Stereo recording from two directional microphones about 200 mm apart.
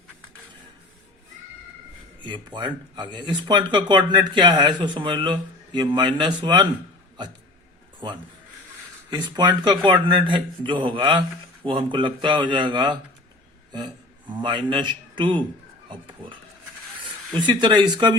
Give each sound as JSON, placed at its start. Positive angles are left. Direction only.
{"t": 2.2, "sound": "speech", "side_deg": -25}
{"t": 8.0, "sound": "a man's voice", "side_deg": -20}